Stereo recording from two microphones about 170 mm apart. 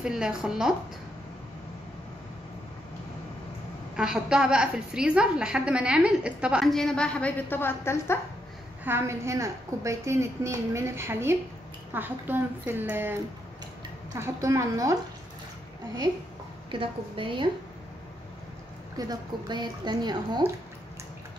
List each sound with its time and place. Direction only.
0.0 s a woman's voice: 5° right (ahead or behind)
3.9 s a woman's voice: 5° right (ahead or behind); by 8.2 s 15° left (ahead or behind)
8.8 s a woman's voice: 15° right (ahead or behind)
16.7 s a woman's voice: 30° right (ahead or behind)
18.9 s a woman's voice: 20° right (ahead or behind)